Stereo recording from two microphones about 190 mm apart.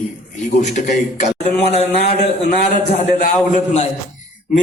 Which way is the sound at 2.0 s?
50° left (ahead or behind).